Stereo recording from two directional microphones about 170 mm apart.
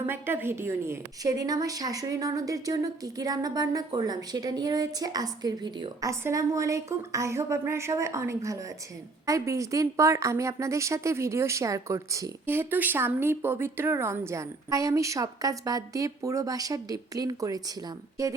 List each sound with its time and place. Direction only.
0.1 s a woman's voice: 10° right (ahead or behind)